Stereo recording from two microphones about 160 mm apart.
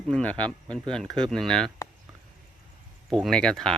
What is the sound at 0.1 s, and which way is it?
Speech, 5° left (ahead or behind).